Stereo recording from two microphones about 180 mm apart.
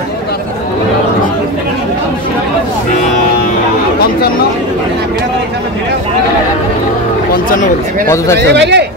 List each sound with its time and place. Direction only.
8.4 s speech: 70° right (ahead or behind)